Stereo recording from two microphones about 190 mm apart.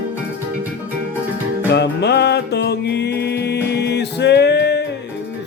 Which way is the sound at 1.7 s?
65° left (ahead or behind).